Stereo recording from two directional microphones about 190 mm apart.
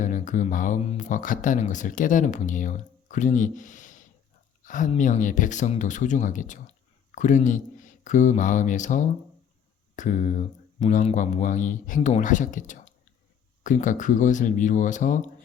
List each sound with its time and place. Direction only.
0.0 s speech: 40° left (ahead or behind)